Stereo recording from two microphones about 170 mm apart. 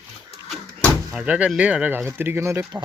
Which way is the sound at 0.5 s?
Centre (ahead or behind).